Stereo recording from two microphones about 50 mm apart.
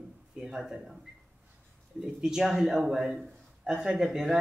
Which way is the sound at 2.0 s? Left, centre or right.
Centre.